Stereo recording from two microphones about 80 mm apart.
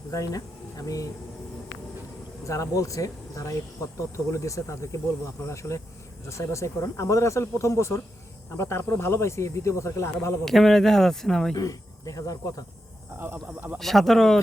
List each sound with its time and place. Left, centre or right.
0.1 s speech: left
2.4 s speech: left
10.4 s speech: centre
11.5 s speech: left
13.1 s speech: right
13.7 s speech: centre